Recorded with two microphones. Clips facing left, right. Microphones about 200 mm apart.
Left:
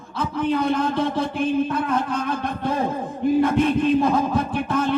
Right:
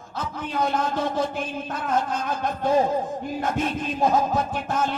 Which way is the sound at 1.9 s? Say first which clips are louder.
Left 2 dB; 55° left (ahead or behind).